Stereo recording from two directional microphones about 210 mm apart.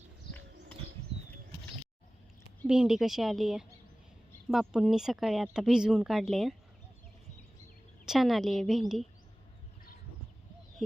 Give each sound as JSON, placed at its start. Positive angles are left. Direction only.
{"t": 2.6, "sound": "speech", "side_deg": -5}
{"t": 8.0, "sound": "speech", "side_deg": 0}